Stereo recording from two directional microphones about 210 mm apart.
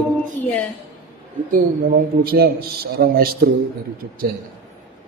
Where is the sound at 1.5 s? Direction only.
40° right (ahead or behind).